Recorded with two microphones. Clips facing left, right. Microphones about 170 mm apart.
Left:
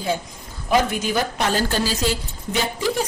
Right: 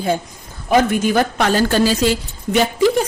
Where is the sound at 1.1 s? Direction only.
65° right (ahead or behind).